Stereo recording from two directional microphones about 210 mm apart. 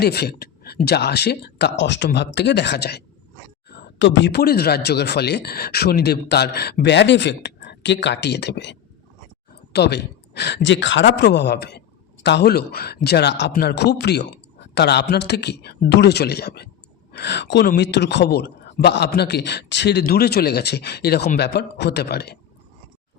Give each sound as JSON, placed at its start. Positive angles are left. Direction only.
{"t": 0.0, "sound": "speech", "side_deg": 50}